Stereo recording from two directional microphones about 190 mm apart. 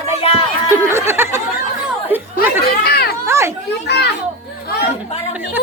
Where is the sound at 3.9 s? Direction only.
60° left (ahead or behind).